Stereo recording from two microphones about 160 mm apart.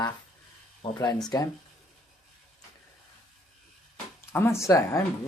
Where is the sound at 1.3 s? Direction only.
25° left (ahead or behind).